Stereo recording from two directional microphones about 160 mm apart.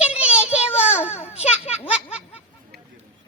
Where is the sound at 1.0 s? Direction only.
15° left (ahead or behind).